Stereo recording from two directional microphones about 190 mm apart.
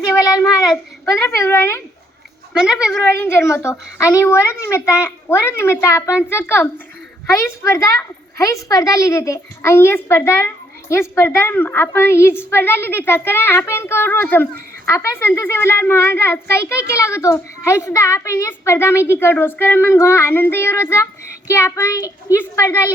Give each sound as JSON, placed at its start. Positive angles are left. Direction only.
{"t": 0.0, "sound": "child singing", "side_deg": 15}
{"t": 1.0, "sound": "a child's voice", "side_deg": 15}
{"t": 2.5, "sound": "a child's voice", "side_deg": -5}
{"t": 3.0, "sound": "a child's voice", "side_deg": 10}